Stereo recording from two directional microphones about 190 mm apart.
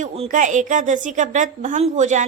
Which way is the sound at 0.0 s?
40° right (ahead or behind).